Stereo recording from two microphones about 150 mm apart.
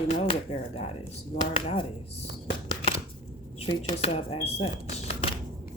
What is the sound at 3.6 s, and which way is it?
Speech, 40° left (ahead or behind).